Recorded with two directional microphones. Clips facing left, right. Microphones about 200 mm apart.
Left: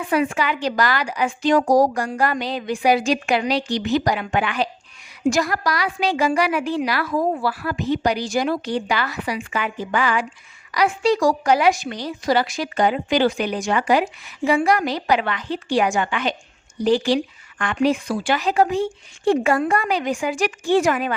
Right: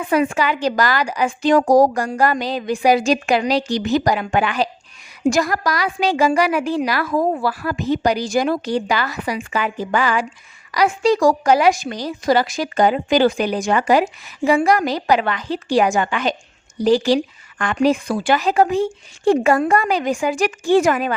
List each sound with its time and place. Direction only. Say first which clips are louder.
0.1 s a woman's voice: right 3 dB; 40° right (ahead or behind)